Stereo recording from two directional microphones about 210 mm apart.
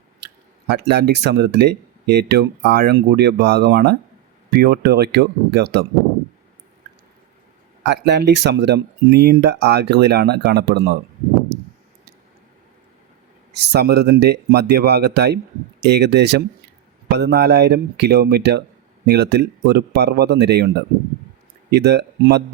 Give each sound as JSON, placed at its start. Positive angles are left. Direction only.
{"t": 0.7, "sound": "speech", "side_deg": -50}
{"t": 7.9, "sound": "speech", "side_deg": -55}
{"t": 13.5, "sound": "speech", "side_deg": -50}